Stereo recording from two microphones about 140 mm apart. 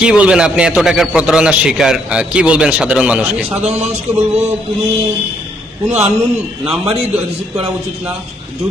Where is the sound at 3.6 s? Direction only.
50° right (ahead or behind).